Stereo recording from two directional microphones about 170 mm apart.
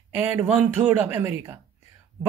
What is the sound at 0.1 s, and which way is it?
Speech, 10° right (ahead or behind).